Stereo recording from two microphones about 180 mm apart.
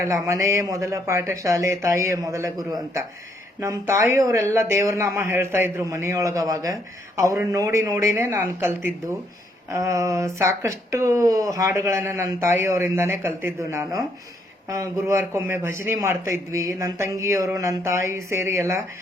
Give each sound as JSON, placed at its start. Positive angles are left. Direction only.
{"t": 0.0, "sound": "speech", "side_deg": -15}